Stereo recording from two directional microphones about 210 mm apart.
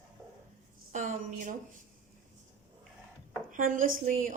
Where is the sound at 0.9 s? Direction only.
35° right (ahead or behind).